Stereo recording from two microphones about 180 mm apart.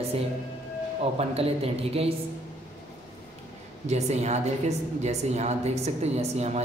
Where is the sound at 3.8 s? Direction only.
40° right (ahead or behind).